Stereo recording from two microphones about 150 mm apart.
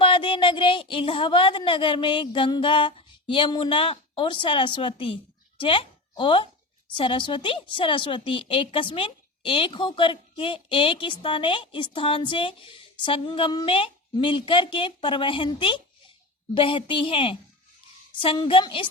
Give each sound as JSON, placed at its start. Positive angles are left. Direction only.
{"t": 0.0, "sound": "a woman's voice", "side_deg": 35}